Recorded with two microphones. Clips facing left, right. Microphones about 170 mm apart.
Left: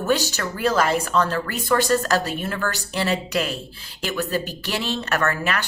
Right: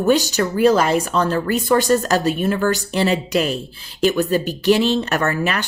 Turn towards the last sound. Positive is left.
turn(degrees=-20)  # may be behind; listen again after turning